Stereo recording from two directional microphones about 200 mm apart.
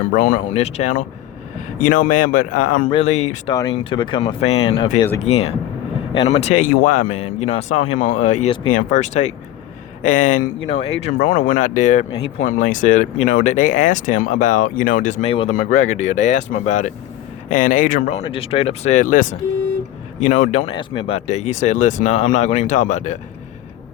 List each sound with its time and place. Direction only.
0.1 s speech: 40° left (ahead or behind)
3.8 s speech: 25° left (ahead or behind)
15.5 s speech: 40° left (ahead or behind)
20.7 s speech: 25° left (ahead or behind)